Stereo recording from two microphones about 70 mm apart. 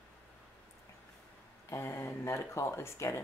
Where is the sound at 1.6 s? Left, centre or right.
Left.